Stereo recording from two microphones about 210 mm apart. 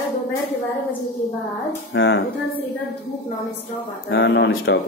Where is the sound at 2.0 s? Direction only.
65° left (ahead or behind).